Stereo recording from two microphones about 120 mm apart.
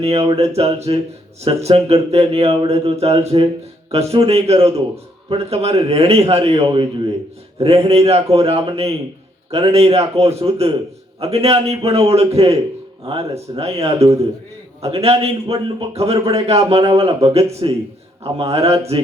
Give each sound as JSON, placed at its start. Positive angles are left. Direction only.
{"t": 0.0, "sound": "speech", "side_deg": -55}
{"t": 7.9, "sound": "speech", "side_deg": -60}